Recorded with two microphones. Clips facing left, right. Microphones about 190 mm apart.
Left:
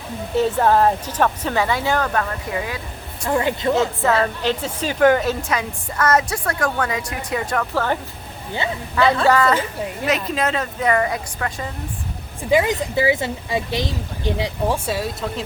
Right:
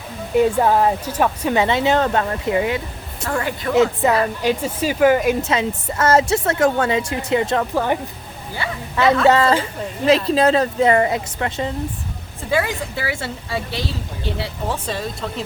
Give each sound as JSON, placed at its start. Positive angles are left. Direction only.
{"t": 0.3, "sound": "speech", "side_deg": -10}
{"t": 1.5, "sound": "speech", "side_deg": -20}
{"t": 3.2, "sound": "speech", "side_deg": 20}
{"t": 3.8, "sound": "speech", "side_deg": -15}
{"t": 9.2, "sound": "speech", "side_deg": -25}
{"t": 12.4, "sound": "speech", "side_deg": 15}